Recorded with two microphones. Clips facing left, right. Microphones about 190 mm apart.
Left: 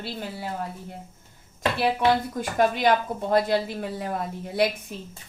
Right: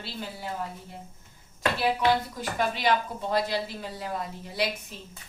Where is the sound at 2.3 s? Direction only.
50° left (ahead or behind).